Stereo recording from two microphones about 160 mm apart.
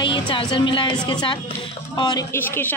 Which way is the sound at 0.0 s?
30° left (ahead or behind).